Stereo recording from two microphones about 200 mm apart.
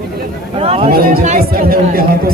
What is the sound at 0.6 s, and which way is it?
Speech, 30° right (ahead or behind).